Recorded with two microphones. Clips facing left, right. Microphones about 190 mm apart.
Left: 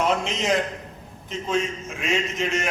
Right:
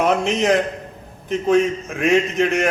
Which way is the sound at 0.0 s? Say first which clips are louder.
Right 6 dB; 60° right (ahead or behind).